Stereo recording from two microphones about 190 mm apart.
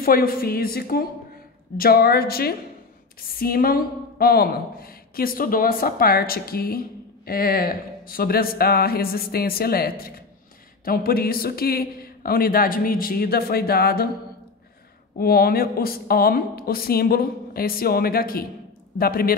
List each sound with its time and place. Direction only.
0.0 s a woman's voice: 50° left (ahead or behind)
15.1 s a woman's voice: 50° left (ahead or behind)